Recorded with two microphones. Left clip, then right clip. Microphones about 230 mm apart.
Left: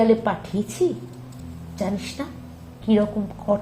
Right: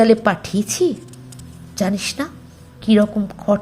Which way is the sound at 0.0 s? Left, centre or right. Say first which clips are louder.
Right 5 dB; centre.